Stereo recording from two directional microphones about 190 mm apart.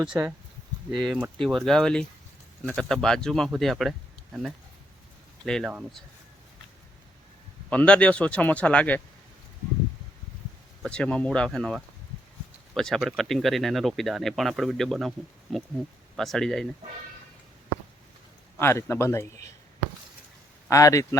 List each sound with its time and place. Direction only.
0.1 s speech: 10° right (ahead or behind)
7.7 s speech: 5° left (ahead or behind)
10.8 s speech: 5° left (ahead or behind)
18.6 s speech: 15° left (ahead or behind)
20.7 s speech: 15° left (ahead or behind)